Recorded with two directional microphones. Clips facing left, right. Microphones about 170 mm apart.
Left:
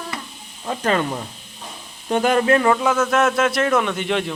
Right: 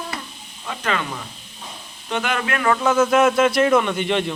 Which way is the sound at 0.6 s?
35° left (ahead or behind).